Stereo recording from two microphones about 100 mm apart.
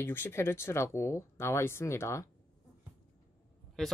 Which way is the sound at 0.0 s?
20° left (ahead or behind).